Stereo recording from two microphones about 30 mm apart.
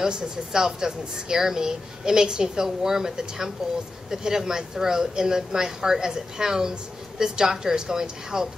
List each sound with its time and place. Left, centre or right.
0.0 s speech: right